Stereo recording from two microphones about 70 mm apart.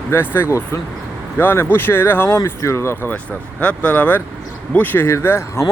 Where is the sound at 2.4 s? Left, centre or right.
Left.